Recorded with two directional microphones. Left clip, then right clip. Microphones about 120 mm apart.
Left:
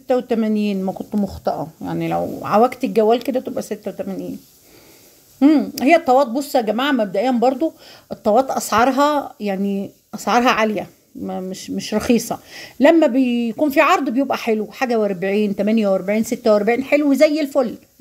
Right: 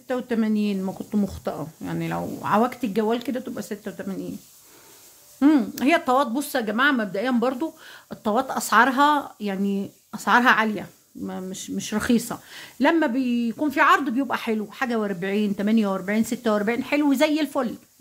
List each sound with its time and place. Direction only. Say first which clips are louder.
0.1 s speech: left 7 dB; 20° left (ahead or behind)
1.0 s speech: left 5 dB; centre (ahead or behind)
2.0 s speech: left 8 dB; 20° left (ahead or behind)
3.8 s speech: left 7 dB; 5° left (ahead or behind)
5.4 s speech: left 5 dB; centre (ahead or behind)
8.1 s speech: left 8 dB; 15° left (ahead or behind)